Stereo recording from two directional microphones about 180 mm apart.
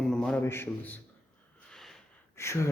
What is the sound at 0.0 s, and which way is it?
Speech, 5° left (ahead or behind).